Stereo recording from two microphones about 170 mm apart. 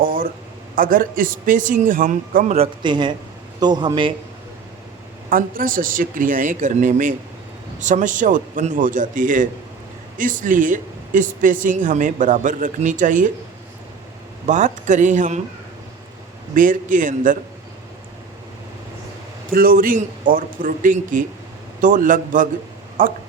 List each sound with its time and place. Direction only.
0.0 s a sound: 55° right (ahead or behind)
0.8 s speech: 55° right (ahead or behind)
2.8 s a man's voice: 25° right (ahead or behind)
5.3 s speech: 55° right (ahead or behind)
14.4 s speech: 45° right (ahead or behind)
16.6 s speech: 50° right (ahead or behind)
19.5 s speech: 55° right (ahead or behind)